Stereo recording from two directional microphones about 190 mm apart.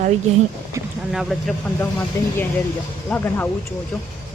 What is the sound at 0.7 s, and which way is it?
Boat, 15° right (ahead or behind).